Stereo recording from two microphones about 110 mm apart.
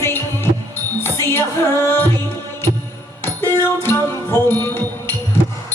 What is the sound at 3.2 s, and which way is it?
Music, 20° left (ahead or behind).